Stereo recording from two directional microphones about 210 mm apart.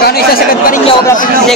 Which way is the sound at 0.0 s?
45° left (ahead or behind).